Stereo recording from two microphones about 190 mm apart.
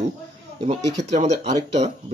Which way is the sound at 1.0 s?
35° right (ahead or behind).